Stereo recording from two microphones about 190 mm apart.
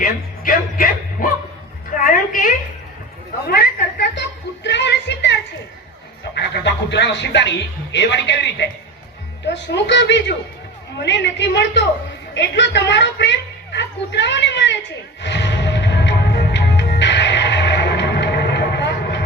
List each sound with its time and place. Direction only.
0.0 s speech: 45° left (ahead or behind)
3.4 s chuckle: 50° left (ahead or behind)
6.3 s a woman's voice: 65° left (ahead or behind)
15.2 s music: 70° left (ahead or behind)